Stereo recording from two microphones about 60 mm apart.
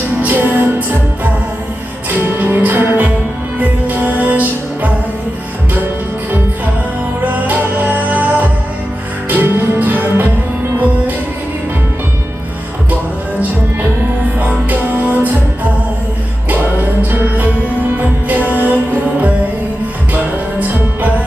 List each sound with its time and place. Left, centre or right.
0.2 s music: right
7.4 s music: right
14.3 s music: right
17.0 s music: right
20.1 s music: right